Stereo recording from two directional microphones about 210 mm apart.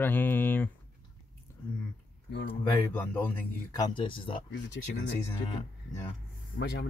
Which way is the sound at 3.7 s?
20° left (ahead or behind).